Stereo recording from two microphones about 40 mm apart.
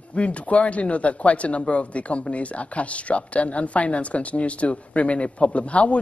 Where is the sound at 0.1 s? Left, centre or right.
Left.